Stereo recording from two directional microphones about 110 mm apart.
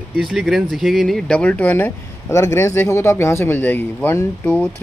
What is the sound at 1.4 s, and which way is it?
Speech, 15° left (ahead or behind).